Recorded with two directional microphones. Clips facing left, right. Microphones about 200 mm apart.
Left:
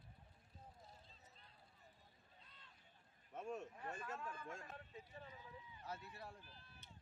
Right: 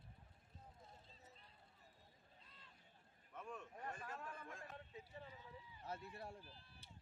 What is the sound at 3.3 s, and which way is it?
Speech, 45° left (ahead or behind).